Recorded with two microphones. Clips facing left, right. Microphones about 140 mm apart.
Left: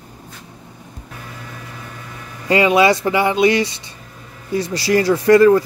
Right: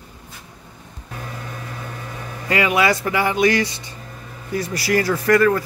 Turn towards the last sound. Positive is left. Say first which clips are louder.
# left 6 dB
turn(degrees=25)  # may be behind; listen again after turning